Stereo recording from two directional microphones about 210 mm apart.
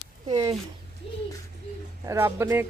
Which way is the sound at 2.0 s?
15° right (ahead or behind).